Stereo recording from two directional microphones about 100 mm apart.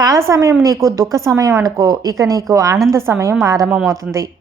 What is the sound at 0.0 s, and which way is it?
A woman's voice, 35° right (ahead or behind).